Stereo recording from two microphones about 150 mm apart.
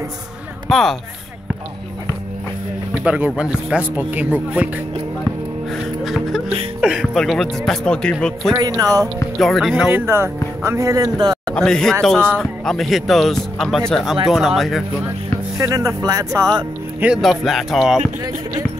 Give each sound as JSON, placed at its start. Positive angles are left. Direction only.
{"t": 0.7, "sound": "speech", "side_deg": 0}
{"t": 3.0, "sound": "speech", "side_deg": -10}
{"t": 5.7, "sound": "music", "side_deg": 0}
{"t": 7.2, "sound": "speech", "side_deg": 5}
{"t": 8.5, "sound": "speech", "side_deg": -25}
{"t": 9.4, "sound": "speech", "side_deg": 0}
{"t": 9.8, "sound": "speech", "side_deg": -15}
{"t": 11.5, "sound": "speech", "side_deg": 5}
{"t": 15.5, "sound": "speech", "side_deg": -20}
{"t": 17.0, "sound": "speech", "side_deg": -5}